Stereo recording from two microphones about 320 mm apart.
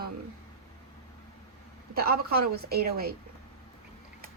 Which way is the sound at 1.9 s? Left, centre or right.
Right.